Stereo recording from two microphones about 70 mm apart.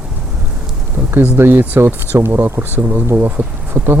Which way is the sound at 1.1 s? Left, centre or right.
Right.